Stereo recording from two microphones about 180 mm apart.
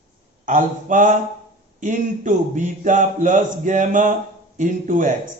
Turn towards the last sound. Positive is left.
turn(degrees=-45)  # may be behind; listen again after turning